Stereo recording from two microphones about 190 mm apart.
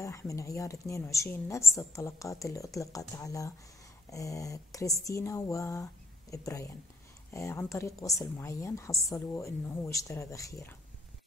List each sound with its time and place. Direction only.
0.0 s a woman's voice: 15° left (ahead or behind)